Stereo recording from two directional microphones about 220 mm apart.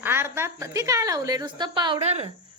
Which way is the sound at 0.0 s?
10° right (ahead or behind).